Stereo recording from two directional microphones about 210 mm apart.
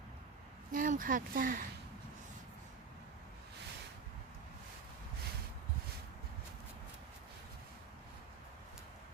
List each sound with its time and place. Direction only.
0.7 s speech: 40° right (ahead or behind)